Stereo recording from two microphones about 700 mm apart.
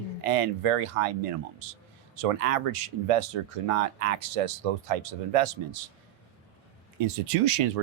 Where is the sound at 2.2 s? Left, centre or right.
Right.